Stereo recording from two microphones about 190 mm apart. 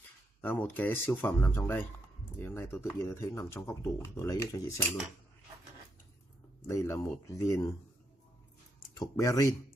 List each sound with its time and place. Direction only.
0.4 s speech: 10° left (ahead or behind)
6.7 s speech: 15° left (ahead or behind)
9.0 s speech: 15° left (ahead or behind)